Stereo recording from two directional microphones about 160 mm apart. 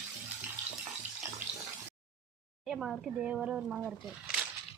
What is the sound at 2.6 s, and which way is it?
Speech, 5° right (ahead or behind).